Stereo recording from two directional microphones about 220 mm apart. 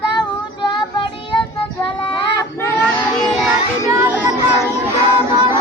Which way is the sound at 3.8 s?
15° right (ahead or behind).